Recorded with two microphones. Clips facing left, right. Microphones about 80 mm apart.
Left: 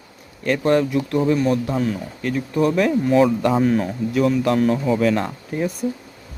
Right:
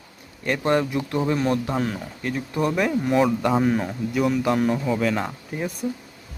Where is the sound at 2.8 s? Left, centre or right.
Centre.